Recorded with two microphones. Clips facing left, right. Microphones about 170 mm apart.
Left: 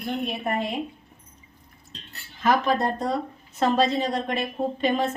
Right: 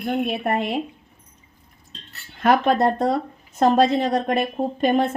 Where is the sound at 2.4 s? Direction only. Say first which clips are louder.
Right 4 dB; 60° right (ahead or behind).